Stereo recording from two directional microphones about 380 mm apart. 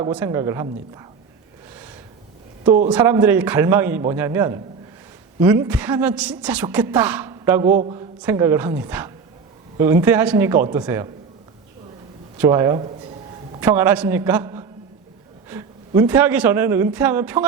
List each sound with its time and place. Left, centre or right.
0.0 s a man's voice: centre
1.7 s gasp: centre
2.6 s a man's voice: centre
12.4 s a man's voice: centre